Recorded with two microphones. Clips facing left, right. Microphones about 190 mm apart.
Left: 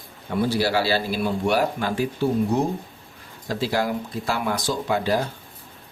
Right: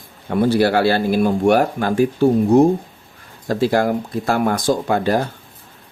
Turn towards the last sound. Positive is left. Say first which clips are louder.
# right 5 dB
turn(degrees=-50)  # may be behind; listen again after turning